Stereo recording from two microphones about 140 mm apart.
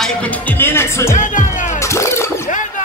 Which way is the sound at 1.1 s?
65° left (ahead or behind).